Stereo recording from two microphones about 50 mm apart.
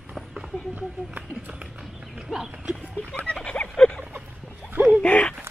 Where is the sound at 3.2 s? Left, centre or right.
Centre.